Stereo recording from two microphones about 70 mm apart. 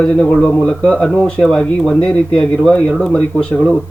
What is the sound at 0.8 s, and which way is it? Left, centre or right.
Speech, centre.